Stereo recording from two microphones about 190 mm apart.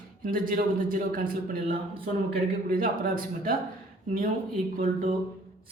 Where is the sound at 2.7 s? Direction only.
50° right (ahead or behind).